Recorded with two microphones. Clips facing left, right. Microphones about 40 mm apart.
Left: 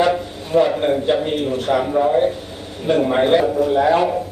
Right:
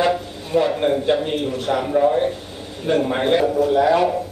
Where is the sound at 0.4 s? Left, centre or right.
Centre.